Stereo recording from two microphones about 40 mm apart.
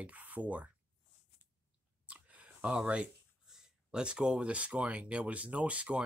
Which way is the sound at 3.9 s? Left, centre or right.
Right.